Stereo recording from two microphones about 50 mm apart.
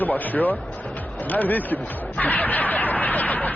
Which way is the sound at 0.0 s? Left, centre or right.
Left.